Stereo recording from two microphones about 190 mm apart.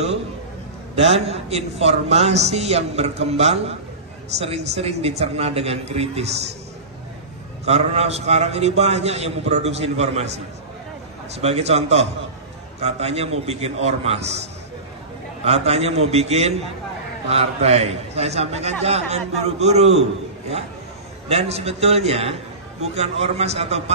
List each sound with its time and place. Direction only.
0.9 s a man's voice: 35° right (ahead or behind)
7.6 s a man's voice: 35° right (ahead or behind)
11.4 s a man's voice: 35° right (ahead or behind)
15.4 s a man's voice: 35° right (ahead or behind)
21.3 s a man's voice: 35° right (ahead or behind)